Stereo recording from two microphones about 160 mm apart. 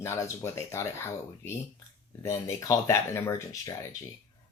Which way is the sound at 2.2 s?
20° left (ahead or behind).